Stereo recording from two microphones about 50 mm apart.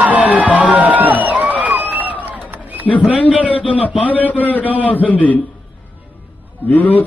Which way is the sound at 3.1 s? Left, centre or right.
Left.